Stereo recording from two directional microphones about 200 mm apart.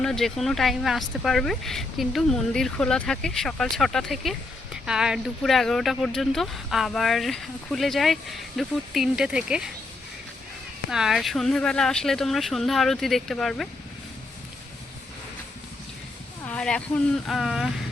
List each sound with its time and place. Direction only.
0.0 s speech: centre (ahead or behind)
10.8 s speech: 5° right (ahead or behind)
16.5 s speech: 5° left (ahead or behind)